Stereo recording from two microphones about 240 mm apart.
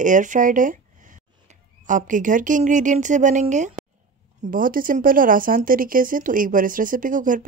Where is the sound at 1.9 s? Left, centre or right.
Right.